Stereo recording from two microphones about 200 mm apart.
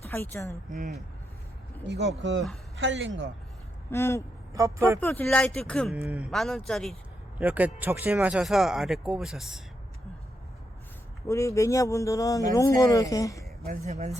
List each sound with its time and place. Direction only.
0.0 s speech: 10° left (ahead or behind)
1.8 s a man's voice: 60° right (ahead or behind)
3.9 s a man's voice: 15° left (ahead or behind)
4.5 s speech: 15° right (ahead or behind)
4.9 s a man's voice: 10° left (ahead or behind)
6.0 s speech: 5° right (ahead or behind)
11.3 s a man's voice: 15° left (ahead or behind)
13.7 s speech: 35° right (ahead or behind)